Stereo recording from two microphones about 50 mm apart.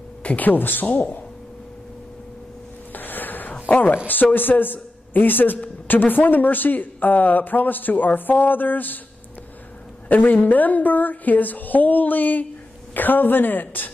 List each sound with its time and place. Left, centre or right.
0.2 s speech: left
2.9 s a sound: left
3.6 s a woman's voice: left
10.0 s speech: left